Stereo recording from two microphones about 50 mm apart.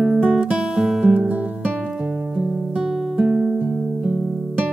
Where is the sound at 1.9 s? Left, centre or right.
Centre.